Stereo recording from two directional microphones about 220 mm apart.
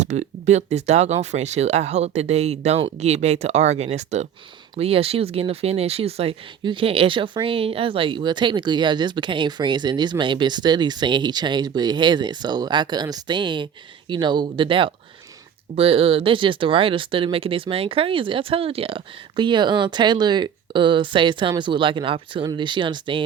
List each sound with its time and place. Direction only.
0.0 s speech: 30° right (ahead or behind)